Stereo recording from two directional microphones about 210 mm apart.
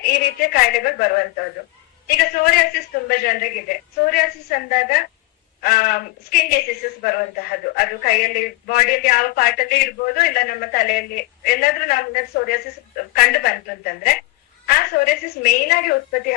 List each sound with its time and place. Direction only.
0.0 s a woman's voice: 45° left (ahead or behind)